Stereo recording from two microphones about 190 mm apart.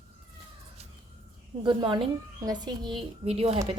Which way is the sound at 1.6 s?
25° right (ahead or behind).